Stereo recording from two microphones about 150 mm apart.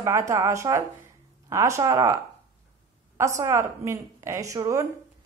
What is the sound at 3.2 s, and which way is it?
A woman's voice, 20° right (ahead or behind).